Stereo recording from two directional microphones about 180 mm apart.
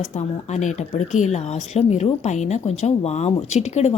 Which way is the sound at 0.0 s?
40° left (ahead or behind).